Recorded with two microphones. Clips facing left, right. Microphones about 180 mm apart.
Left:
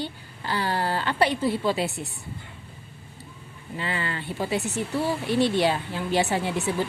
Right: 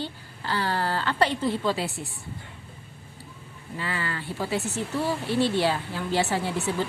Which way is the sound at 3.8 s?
20° left (ahead or behind).